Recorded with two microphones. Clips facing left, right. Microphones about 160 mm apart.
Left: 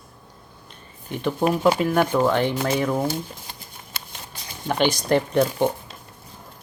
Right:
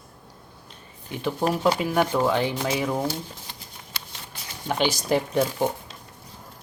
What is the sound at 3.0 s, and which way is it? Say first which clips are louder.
Speech: left 3 dB; 50° left (ahead or behind).